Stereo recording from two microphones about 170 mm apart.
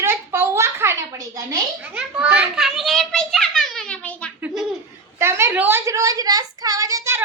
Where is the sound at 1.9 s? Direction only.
5° right (ahead or behind).